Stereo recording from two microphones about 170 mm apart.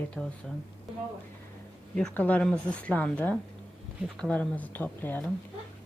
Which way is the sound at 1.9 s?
5° left (ahead or behind).